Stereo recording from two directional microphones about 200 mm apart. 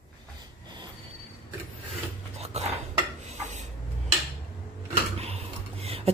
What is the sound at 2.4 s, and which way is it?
Cutlery, 30° right (ahead or behind).